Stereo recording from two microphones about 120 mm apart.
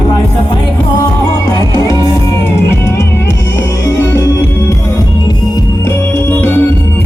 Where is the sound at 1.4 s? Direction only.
30° left (ahead or behind).